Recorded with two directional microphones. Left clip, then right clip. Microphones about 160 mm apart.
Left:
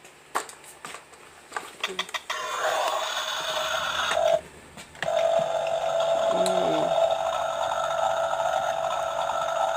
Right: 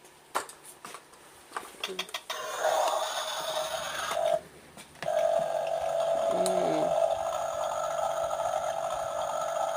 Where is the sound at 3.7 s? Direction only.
35° right (ahead or behind).